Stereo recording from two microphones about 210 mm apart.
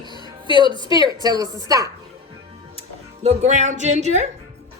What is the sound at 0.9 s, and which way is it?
Speech, 15° right (ahead or behind).